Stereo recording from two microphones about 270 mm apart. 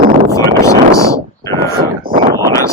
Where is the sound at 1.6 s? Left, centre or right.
Right.